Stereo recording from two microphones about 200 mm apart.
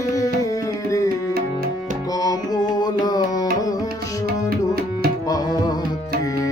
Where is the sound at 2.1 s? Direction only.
20° left (ahead or behind).